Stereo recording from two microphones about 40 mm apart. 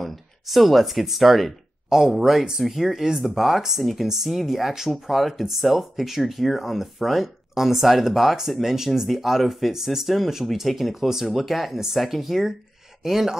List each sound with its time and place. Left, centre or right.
0.0 s speech: centre
1.9 s speech: centre